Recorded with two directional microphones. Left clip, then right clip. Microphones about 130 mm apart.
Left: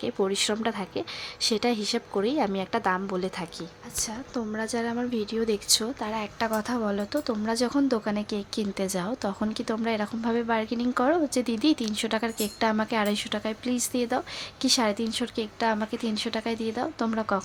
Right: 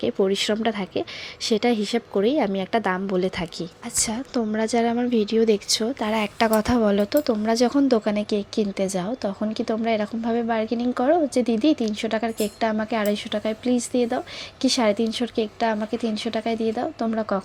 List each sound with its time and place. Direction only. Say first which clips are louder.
0.0 s speech: right 5 dB; 20° right (ahead or behind)
3.9 s a woman's voice: right 7 dB; 45° right (ahead or behind); by 5.5 s 30° right (ahead or behind)
5.6 s a woman's voice: right 2 dB; 15° right (ahead or behind)
6.0 s a woman's voice: right 7 dB; 45° right (ahead or behind); by 17.4 s 10° right (ahead or behind)